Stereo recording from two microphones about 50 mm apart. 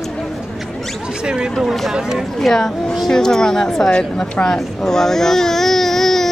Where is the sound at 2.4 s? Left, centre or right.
Centre.